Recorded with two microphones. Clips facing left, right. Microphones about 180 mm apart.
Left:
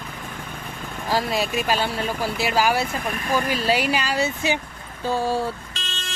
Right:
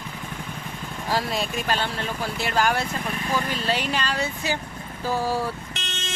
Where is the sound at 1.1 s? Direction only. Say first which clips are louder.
Left 3 dB; centre (ahead or behind).